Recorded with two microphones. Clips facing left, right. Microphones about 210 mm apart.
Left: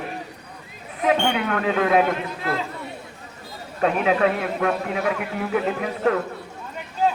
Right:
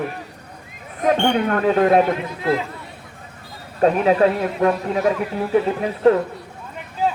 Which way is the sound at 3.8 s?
35° right (ahead or behind).